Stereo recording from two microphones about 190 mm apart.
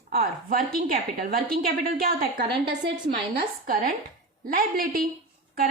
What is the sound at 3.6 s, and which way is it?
A woman's voice, 45° right (ahead or behind).